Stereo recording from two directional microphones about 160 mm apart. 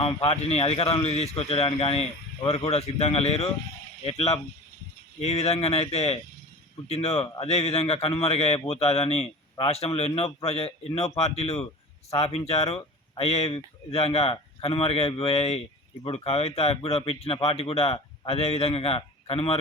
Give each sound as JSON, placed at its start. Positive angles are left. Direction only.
{"t": 0.0, "sound": "a man's voice", "side_deg": 35}